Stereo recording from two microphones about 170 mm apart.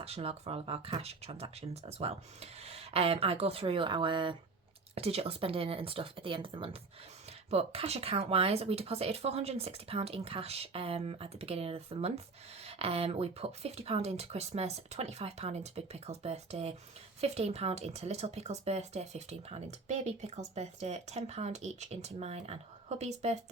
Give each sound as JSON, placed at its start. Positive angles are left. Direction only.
{"t": 0.0, "sound": "speech", "side_deg": -35}